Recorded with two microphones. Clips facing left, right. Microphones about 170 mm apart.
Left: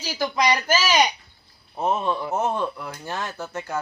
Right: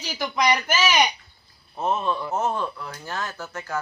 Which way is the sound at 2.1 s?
15° left (ahead or behind).